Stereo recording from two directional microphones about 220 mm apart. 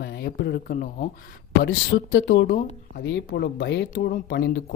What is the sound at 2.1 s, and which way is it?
Speech, 50° left (ahead or behind).